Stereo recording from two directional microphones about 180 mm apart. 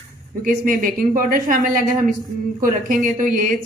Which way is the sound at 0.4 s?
50° right (ahead or behind).